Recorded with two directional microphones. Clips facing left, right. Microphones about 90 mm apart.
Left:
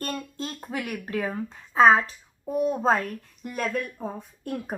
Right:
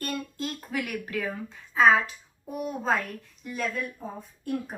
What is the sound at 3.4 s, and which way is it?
Speech, 55° left (ahead or behind).